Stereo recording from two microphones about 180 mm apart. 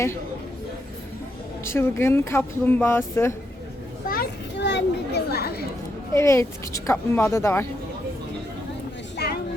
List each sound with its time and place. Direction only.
1.6 s speech: 15° left (ahead or behind)
4.1 s children playing: 65° left (ahead or behind)
6.1 s speech: 15° left (ahead or behind)